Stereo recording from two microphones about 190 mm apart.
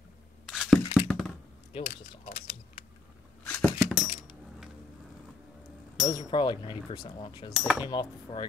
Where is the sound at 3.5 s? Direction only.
10° left (ahead or behind).